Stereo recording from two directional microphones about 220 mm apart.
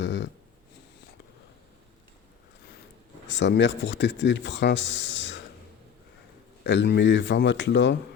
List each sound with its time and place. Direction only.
0.0 s dog: 55° left (ahead or behind)
3.2 s speech: 55° left (ahead or behind)
6.7 s speech: 50° left (ahead or behind)